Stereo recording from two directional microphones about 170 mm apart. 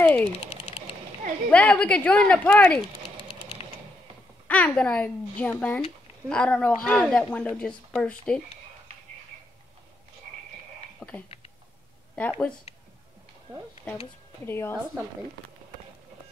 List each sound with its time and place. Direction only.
0.0 s speech: 10° left (ahead or behind)
0.5 s a sound: 35° left (ahead or behind)
1.5 s speech: 10° left (ahead or behind)
4.5 s a woman's voice: 5° left (ahead or behind)
11.0 s speech: 5° left (ahead or behind)
14.4 s speech: 15° left (ahead or behind)